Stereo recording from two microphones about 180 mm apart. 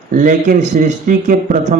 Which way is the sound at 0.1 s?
45° right (ahead or behind).